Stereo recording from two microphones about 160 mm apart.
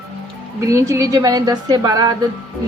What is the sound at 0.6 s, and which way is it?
A woman's voice, 20° right (ahead or behind).